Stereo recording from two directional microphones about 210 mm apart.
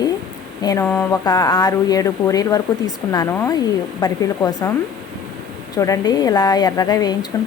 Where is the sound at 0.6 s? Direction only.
15° left (ahead or behind).